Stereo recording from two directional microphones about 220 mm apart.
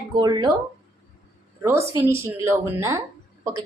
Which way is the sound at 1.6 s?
10° right (ahead or behind).